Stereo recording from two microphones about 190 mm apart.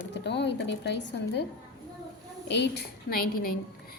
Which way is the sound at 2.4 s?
65° left (ahead or behind).